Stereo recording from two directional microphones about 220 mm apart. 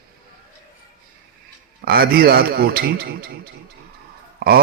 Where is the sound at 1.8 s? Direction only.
45° right (ahead or behind).